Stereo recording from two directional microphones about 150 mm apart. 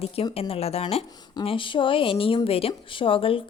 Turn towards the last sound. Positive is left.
turn(degrees=35)  # may be behind; listen again after turning